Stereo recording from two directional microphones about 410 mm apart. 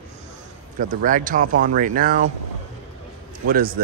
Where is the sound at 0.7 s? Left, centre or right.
Centre.